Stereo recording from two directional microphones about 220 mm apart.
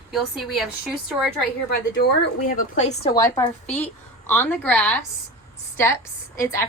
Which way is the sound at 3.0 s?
15° left (ahead or behind).